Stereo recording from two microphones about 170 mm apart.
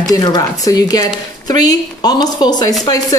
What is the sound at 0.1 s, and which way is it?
A woman's voice, 20° left (ahead or behind).